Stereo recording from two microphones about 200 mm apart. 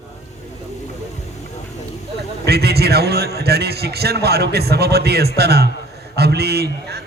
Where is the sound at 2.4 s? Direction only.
55° right (ahead or behind).